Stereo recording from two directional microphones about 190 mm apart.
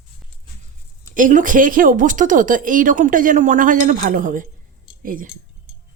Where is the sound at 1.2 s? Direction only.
45° right (ahead or behind).